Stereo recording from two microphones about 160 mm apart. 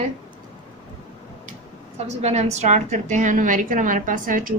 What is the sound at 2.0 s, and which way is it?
A woman's voice, 40° right (ahead or behind).